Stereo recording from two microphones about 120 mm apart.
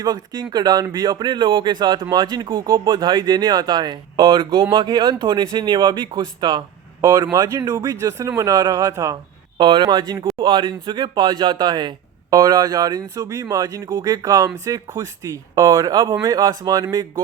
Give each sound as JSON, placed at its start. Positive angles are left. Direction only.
{"t": 0.0, "sound": "speech", "side_deg": -35}
{"t": 9.6, "sound": "speech", "side_deg": -40}